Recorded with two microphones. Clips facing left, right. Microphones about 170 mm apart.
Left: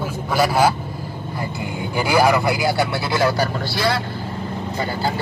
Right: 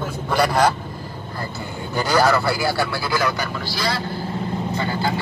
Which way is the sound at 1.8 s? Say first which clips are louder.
Left 1 dB; 10° left (ahead or behind).